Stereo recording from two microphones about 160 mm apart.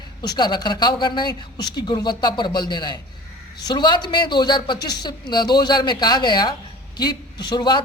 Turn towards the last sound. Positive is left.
turn(degrees=25)  # may be behind; listen again after turning